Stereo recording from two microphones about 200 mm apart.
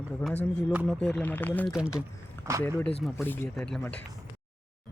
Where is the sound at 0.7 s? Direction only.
5° right (ahead or behind).